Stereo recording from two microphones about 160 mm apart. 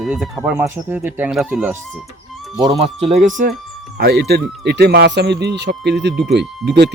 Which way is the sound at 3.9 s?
90° right.